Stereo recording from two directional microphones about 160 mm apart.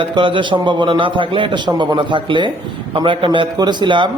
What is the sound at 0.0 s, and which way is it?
A man's voice, 30° right (ahead or behind).